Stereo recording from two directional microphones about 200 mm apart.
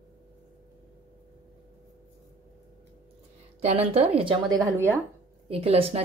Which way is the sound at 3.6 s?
30° right (ahead or behind).